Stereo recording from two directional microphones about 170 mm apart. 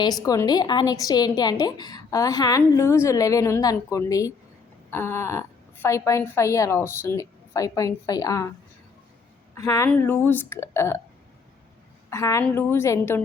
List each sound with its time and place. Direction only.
0.0 s a woman's voice: 20° left (ahead or behind)
9.6 s a woman's voice: 20° left (ahead or behind)
12.1 s a woman's voice: 15° left (ahead or behind)